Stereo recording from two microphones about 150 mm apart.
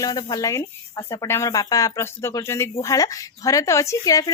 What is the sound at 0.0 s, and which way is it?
Speech, 25° left (ahead or behind).